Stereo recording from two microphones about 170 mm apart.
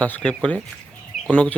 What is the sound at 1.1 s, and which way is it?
Bird, centre (ahead or behind).